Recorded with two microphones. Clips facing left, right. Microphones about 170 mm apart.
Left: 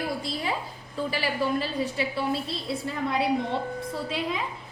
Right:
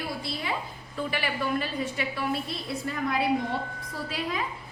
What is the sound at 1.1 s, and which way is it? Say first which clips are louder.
A woman's voice: left 2 dB; 35° left (ahead or behind).